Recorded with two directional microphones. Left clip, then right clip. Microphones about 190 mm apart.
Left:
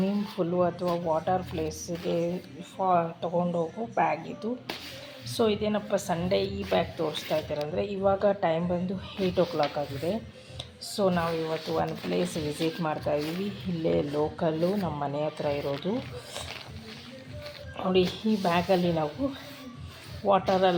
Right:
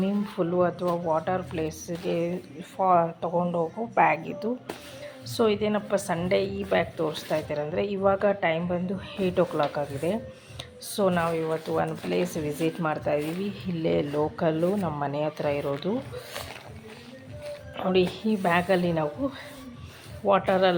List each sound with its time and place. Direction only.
0.0 s a woman's voice: 10° right (ahead or behind)
14.6 s speech: 20° right (ahead or behind)
15.6 s speech: 20° right (ahead or behind)
17.7 s a woman's voice: 5° right (ahead or behind)
20.2 s speech: 10° right (ahead or behind)